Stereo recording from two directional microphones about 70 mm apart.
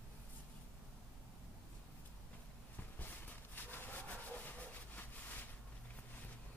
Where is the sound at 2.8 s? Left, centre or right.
Left.